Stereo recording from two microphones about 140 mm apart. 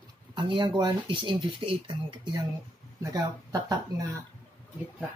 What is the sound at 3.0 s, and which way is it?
Speech, 25° right (ahead or behind).